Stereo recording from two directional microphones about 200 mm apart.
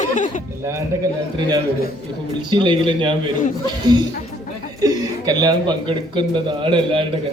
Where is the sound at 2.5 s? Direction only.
25° right (ahead or behind).